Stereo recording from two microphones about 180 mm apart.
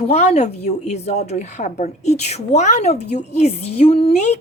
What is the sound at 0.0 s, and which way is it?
Speech, 35° left (ahead or behind).